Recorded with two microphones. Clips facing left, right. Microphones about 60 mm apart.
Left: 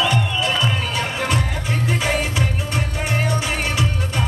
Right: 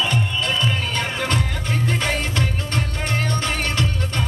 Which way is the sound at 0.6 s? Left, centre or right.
Centre.